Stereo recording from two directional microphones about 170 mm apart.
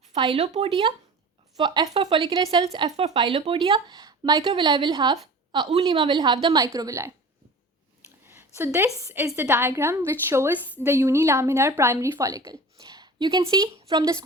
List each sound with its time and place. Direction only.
0.2 s a woman's voice: 35° right (ahead or behind)
2.9 s speech: 40° right (ahead or behind)
3.2 s a woman's voice: 30° right (ahead or behind)
8.4 s a woman's voice: 15° right (ahead or behind)
12.8 s a sound: 25° right (ahead or behind)
13.4 s a woman's voice: 20° right (ahead or behind)